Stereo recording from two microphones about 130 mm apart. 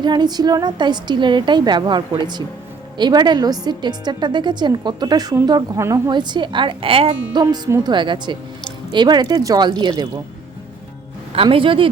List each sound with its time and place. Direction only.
0.0 s a woman's voice: 35° right (ahead or behind)
11.4 s a woman's voice: 40° right (ahead or behind)